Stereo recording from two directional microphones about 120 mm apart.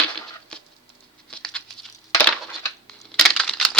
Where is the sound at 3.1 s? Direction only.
Centre (ahead or behind).